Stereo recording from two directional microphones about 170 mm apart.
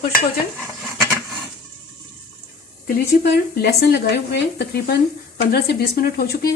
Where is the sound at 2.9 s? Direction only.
65° left (ahead or behind).